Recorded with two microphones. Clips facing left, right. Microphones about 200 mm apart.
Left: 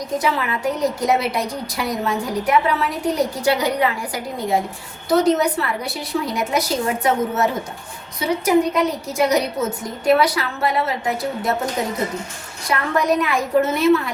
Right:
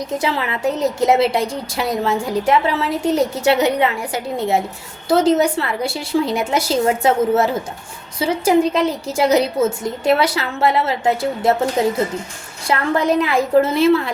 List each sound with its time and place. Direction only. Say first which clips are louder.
0.2 s a woman's voice: even; 25° right (ahead or behind)